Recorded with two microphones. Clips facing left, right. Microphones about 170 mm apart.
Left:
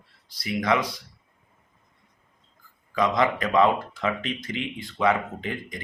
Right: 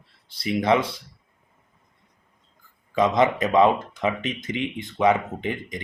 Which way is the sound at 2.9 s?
20° right (ahead or behind).